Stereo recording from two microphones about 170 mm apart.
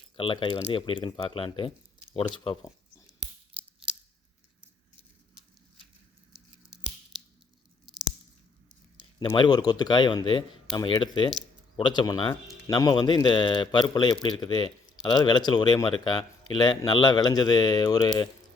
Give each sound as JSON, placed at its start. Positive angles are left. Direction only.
{"t": 0.2, "sound": "speech", "side_deg": 30}
{"t": 3.5, "sound": "a sound", "side_deg": -10}
{"t": 9.3, "sound": "speech", "side_deg": 25}